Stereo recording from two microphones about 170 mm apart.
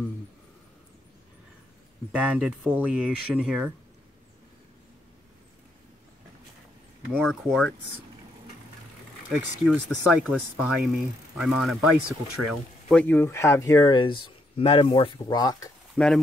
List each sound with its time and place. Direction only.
2.1 s speech: 10° right (ahead or behind)
7.1 s speech: centre (ahead or behind)
9.3 s speech: centre (ahead or behind); by 15.7 s 25° left (ahead or behind)
15.9 s speech: centre (ahead or behind)